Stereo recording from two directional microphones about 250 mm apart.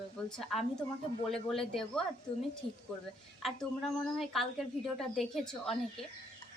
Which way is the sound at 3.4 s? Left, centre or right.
Centre.